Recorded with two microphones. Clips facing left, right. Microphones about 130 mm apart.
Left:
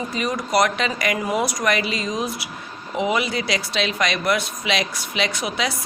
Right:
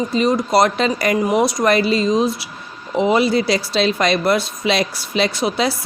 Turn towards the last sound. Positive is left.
turn(degrees=-30)  # may be behind; listen again after turning